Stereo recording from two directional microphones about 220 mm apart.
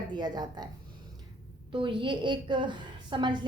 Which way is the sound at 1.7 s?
20° right (ahead or behind).